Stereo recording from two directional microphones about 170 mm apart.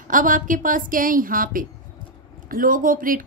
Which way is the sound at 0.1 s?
50° right (ahead or behind).